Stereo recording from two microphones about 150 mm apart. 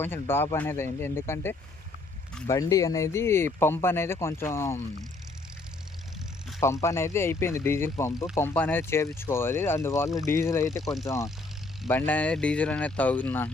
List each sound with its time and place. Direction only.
0.0 s speech: 15° left (ahead or behind)
6.8 s speech: 20° left (ahead or behind)
11.9 s speech: 10° left (ahead or behind)